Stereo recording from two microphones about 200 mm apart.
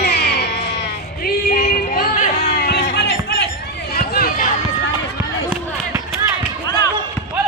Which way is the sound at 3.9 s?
45° left (ahead or behind).